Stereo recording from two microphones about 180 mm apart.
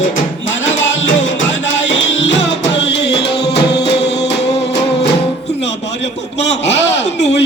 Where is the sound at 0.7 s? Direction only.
90° left; by 4.3 s 70° left (ahead or behind).